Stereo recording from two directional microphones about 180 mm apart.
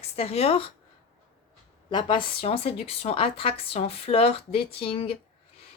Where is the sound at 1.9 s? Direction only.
25° left (ahead or behind).